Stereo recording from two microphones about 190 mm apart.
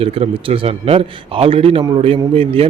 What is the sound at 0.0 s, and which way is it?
A man's voice, 30° right (ahead or behind).